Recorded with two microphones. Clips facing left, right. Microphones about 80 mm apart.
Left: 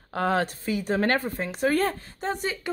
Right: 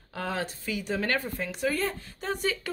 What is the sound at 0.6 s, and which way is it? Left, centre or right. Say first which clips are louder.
Speech: left 5 dB; left.